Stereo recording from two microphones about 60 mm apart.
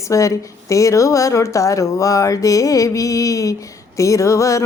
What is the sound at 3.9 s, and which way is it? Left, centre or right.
Speech, left.